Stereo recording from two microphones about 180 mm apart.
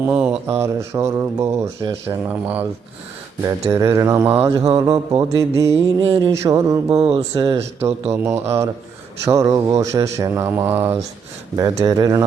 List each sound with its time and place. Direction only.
0.1 s speech: 5° right (ahead or behind)
4.5 s mantra: 20° right (ahead or behind)
6.4 s speech: 15° right (ahead or behind)
6.9 s a sound: 30° right (ahead or behind)
7.3 s mantra: 20° right (ahead or behind)
8.1 s speech: 15° right (ahead or behind)
11.8 s mantra: 20° right (ahead or behind)